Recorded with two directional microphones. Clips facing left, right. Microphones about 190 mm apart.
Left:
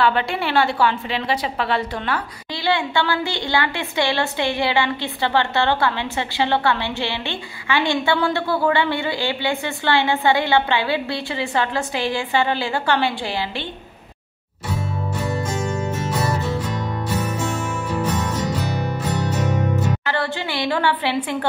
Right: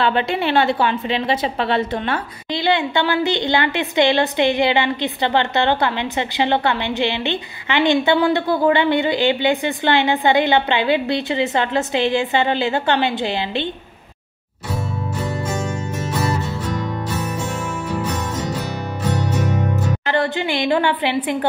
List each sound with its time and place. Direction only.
0.0 s a woman's voice: 20° right (ahead or behind)
20.1 s a woman's voice: 20° right (ahead or behind)